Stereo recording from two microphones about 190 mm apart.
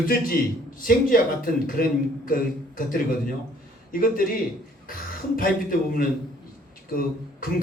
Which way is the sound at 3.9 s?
50° left (ahead or behind).